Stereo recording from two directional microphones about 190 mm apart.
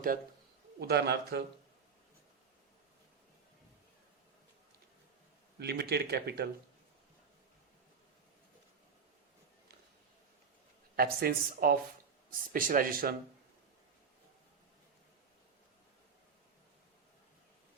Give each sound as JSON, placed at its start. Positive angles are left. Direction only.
{"t": 0.8, "sound": "speech", "side_deg": -60}
{"t": 5.5, "sound": "speech", "side_deg": -60}
{"t": 10.9, "sound": "speech", "side_deg": -50}